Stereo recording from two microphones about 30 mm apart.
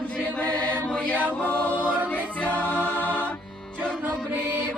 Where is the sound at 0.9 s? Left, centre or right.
Left.